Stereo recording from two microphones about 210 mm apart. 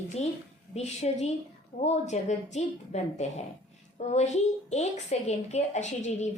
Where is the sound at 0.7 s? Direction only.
30° left (ahead or behind).